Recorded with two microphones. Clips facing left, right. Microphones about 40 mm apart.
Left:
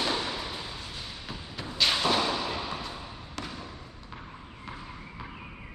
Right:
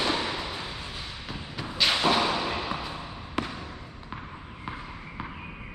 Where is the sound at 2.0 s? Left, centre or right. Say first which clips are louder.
Right 3 dB; centre.